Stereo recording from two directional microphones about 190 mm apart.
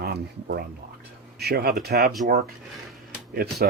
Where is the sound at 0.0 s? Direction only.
55° right (ahead or behind).